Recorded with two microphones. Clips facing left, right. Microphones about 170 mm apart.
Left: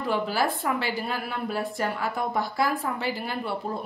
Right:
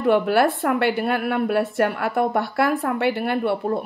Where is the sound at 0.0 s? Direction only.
60° right (ahead or behind).